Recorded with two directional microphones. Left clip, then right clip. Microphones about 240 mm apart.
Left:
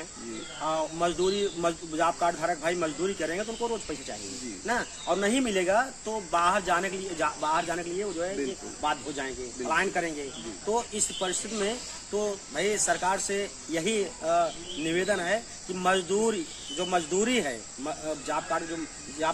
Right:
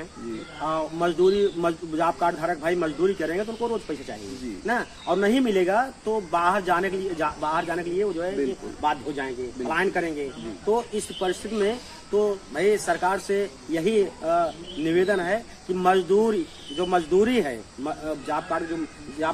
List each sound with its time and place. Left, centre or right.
0.7 s speech: left
4.6 s speech: left